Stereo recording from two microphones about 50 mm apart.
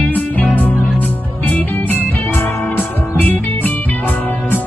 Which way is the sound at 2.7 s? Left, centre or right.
Left.